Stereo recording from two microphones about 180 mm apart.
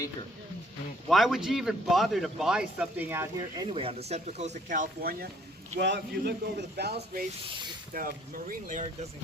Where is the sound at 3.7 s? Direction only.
35° right (ahead or behind); by 7.2 s 65° right (ahead or behind).